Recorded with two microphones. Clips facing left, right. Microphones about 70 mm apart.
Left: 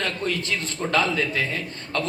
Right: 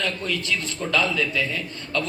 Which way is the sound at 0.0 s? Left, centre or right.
Left.